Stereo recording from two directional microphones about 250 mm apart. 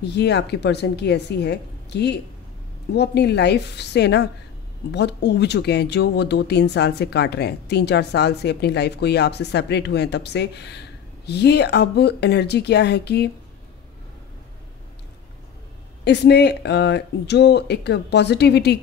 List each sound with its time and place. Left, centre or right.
0.0 s speech: left
16.0 s speech: left